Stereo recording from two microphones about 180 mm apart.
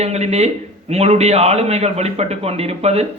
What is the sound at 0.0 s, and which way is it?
A man's voice, 35° right (ahead or behind).